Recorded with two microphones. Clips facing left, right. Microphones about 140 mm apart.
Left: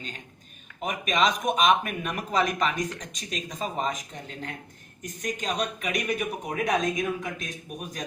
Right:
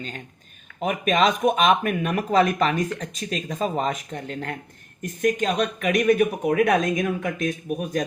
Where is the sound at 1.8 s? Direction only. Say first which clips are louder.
Right 8 dB; 45° right (ahead or behind).